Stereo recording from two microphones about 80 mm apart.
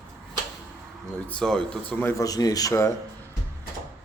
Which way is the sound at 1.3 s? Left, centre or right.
Centre.